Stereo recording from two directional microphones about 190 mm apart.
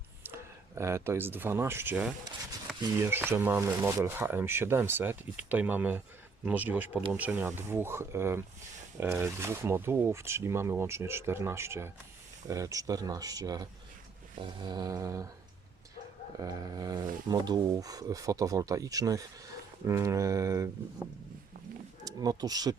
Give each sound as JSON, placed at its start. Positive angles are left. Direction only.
{"t": 0.8, "sound": "speech", "side_deg": -15}
{"t": 16.4, "sound": "speech", "side_deg": -20}
{"t": 22.0, "sound": "speech", "side_deg": -20}